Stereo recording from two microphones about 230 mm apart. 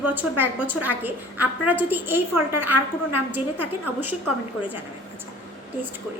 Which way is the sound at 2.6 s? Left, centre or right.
Left.